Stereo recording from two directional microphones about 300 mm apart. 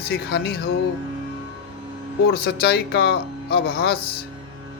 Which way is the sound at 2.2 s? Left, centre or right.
Left.